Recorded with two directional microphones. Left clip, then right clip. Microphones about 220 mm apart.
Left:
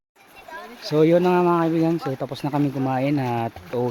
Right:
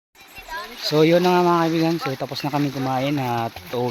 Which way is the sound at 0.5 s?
40° left (ahead or behind).